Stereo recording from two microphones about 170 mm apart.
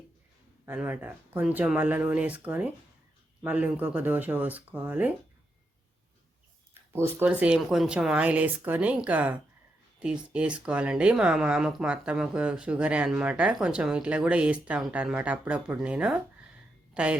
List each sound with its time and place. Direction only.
0.6 s speech: 10° right (ahead or behind)
6.9 s speech: 15° right (ahead or behind)